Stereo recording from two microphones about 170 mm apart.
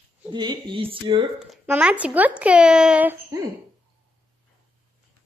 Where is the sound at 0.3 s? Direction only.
25° right (ahead or behind).